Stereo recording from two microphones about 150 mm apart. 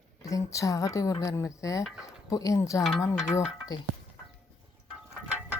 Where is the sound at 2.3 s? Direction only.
20° left (ahead or behind).